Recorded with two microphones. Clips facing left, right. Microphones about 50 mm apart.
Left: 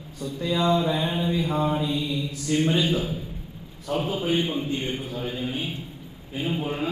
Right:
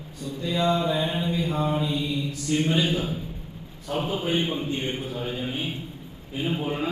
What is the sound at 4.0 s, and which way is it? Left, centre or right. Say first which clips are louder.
Mantra: even; centre.